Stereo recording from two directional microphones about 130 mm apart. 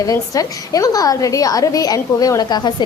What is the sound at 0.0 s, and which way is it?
A woman's voice, 25° left (ahead or behind).